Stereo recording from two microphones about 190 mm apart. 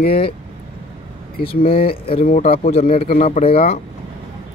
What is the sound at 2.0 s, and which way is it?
Speech, 30° left (ahead or behind).